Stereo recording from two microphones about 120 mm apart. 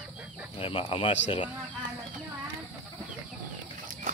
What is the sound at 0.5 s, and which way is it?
Speech, 50° left (ahead or behind).